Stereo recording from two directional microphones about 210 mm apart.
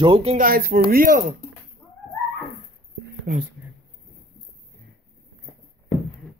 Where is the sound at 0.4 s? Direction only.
45° right (ahead or behind).